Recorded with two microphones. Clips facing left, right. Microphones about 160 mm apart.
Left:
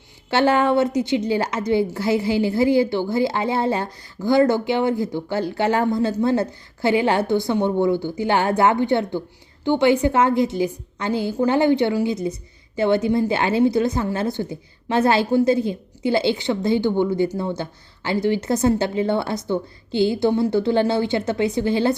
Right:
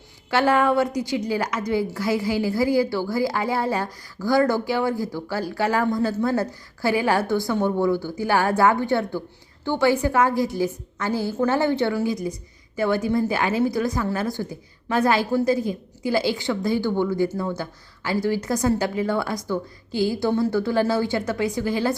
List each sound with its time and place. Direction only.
0.3 s a woman's voice: 25° left (ahead or behind)